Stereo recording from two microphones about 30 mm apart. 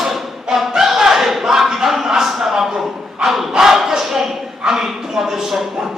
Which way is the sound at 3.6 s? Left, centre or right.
Centre.